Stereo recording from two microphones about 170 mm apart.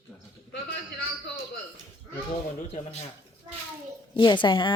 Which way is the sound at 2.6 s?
40° left (ahead or behind).